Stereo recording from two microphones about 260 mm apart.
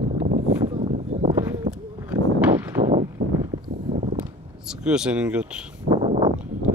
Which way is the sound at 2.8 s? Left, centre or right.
Centre.